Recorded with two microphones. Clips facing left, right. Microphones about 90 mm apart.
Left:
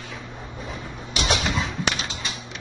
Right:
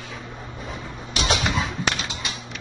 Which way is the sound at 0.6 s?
Centre (ahead or behind).